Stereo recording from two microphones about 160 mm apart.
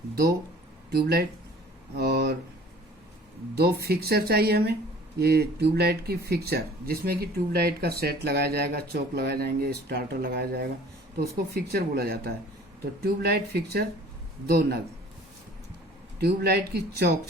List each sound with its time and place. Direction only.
0.9 s speech: 85° right
3.5 s speech: 80° right
16.2 s speech: 85° right